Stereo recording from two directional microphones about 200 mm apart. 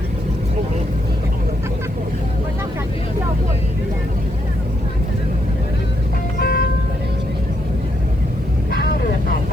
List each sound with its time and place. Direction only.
6.4 s music: 50° left (ahead or behind)